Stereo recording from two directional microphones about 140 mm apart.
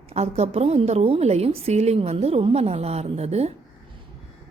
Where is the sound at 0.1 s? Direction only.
50° right (ahead or behind).